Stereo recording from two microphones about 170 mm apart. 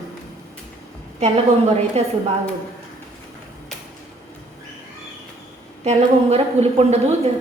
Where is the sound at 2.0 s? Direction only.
40° right (ahead or behind).